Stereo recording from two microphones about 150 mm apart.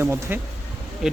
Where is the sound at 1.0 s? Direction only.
5° right (ahead or behind).